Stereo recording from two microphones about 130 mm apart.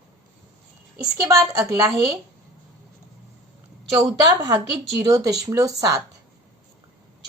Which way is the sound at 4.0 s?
30° right (ahead or behind).